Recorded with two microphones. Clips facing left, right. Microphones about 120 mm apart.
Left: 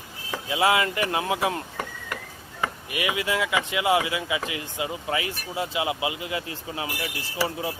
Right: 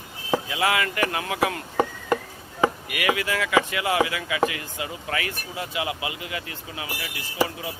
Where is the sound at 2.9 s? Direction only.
25° left (ahead or behind).